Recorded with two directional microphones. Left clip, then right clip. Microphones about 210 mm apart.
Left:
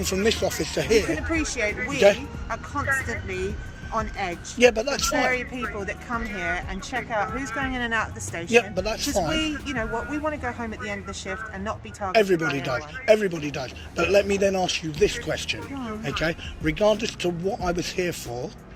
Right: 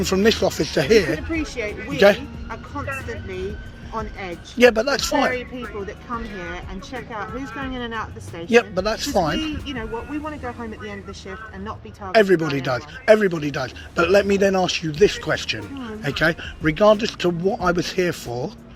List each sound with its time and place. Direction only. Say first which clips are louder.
0.0 s speech: right 5 dB; 45° right (ahead or behind)
1.3 s speech: left 1 dB; centre (ahead or behind)
2.0 s speech: right 3 dB; 40° right (ahead or behind)
2.5 s speech: left 4 dB; centre (ahead or behind)
4.5 s speech: right 4 dB; 40° right (ahead or behind)
6.1 s speech: left 5 dB; centre (ahead or behind)
8.4 s speech: right 4 dB; 35° right (ahead or behind)
10.2 s speech: left 2 dB; centre (ahead or behind)
12.1 s speech: right 4 dB; 35° right (ahead or behind)